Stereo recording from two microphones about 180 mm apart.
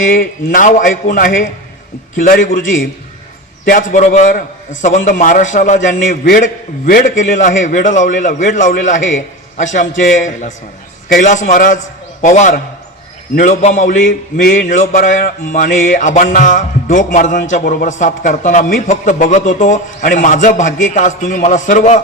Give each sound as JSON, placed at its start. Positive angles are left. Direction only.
{"t": 0.1, "sound": "a man's voice", "side_deg": 50}
{"t": 3.7, "sound": "a man's voice", "side_deg": 45}